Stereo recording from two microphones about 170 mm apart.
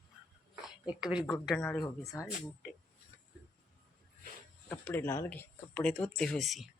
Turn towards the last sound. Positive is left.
turn(degrees=0)  # may be behind; listen again after turning